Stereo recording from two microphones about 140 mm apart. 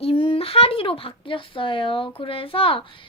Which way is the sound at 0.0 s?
45° left (ahead or behind).